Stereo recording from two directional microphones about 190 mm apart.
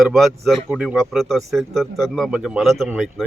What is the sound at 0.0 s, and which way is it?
Speech, centre (ahead or behind).